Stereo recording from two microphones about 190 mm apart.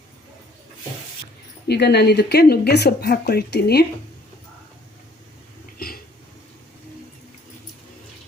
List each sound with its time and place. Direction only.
1.6 s speech: 60° left (ahead or behind)